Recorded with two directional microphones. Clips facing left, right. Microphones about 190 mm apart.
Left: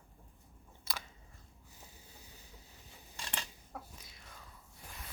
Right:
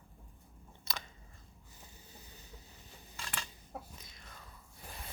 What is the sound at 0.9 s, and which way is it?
Biting, 10° left (ahead or behind).